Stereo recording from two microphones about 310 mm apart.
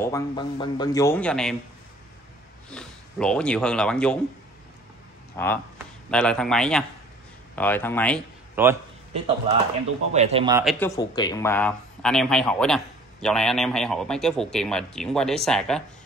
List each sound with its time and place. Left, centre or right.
0.0 s a man's voice: centre
2.7 s speech: centre
5.3 s speech: centre
8.6 s a man's voice: centre
10.1 s speech: centre
10.6 s speech: centre
11.0 s speech: centre